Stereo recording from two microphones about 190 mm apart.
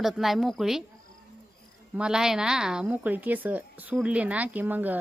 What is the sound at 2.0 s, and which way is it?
A woman's voice, 5° right (ahead or behind).